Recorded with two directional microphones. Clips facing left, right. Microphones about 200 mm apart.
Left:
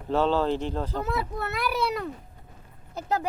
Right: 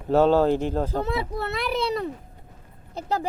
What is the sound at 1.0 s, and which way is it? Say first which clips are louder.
Speech: right 3 dB; 30° right (ahead or behind).